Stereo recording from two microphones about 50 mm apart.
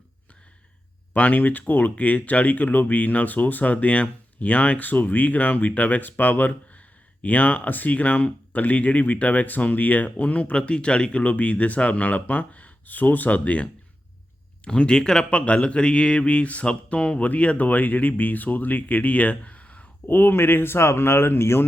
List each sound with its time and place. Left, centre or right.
1.1 s speech: left; by 15.3 s centre
15.3 s speech: left
20.1 s speech: left